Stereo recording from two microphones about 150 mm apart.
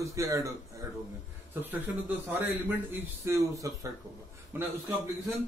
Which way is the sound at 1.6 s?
10° right (ahead or behind).